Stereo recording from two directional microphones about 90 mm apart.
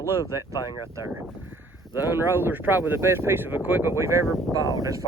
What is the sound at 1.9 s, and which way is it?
Speech, 25° right (ahead or behind).